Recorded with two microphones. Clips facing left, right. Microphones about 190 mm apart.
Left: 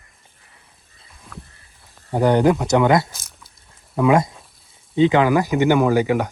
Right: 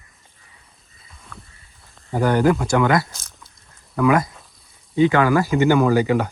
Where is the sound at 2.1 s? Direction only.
20° left (ahead or behind).